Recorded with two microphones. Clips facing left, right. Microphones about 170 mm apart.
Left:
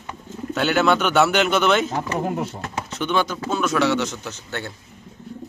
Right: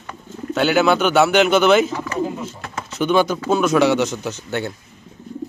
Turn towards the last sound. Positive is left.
turn(degrees=-10)  # may be behind; listen again after turning